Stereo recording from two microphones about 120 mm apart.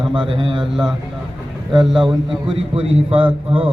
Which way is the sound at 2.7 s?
50° right (ahead or behind).